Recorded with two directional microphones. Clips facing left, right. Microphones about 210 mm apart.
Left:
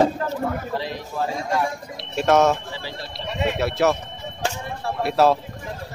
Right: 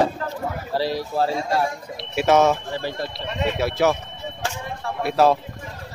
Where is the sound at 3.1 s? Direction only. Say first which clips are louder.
Left 4 dB; centre (ahead or behind).